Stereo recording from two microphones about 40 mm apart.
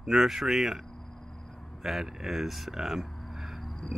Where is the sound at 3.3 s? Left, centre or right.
Centre.